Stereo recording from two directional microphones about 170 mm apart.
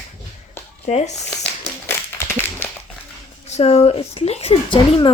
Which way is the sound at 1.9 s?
15° left (ahead or behind).